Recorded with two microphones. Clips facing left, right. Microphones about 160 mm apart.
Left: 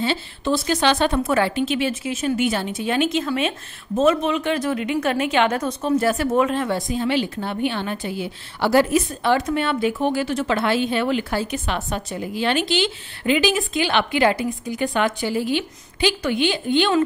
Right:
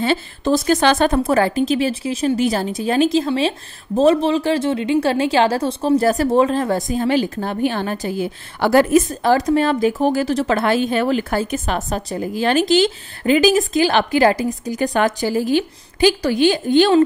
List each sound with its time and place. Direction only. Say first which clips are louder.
0.0 s a woman's voice: right 4 dB; 45° right (ahead or behind)